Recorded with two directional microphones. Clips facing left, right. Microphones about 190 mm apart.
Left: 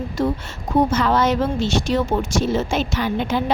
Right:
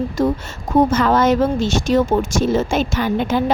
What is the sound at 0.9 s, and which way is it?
Speech, 50° right (ahead or behind).